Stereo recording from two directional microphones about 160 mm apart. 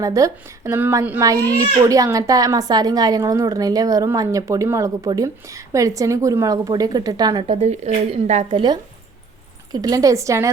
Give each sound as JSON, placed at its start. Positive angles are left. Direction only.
{"t": 0.0, "sound": "a woman's voice", "side_deg": -20}
{"t": 7.4, "sound": "speech", "side_deg": -40}
{"t": 8.4, "sound": "a child's voice", "side_deg": -30}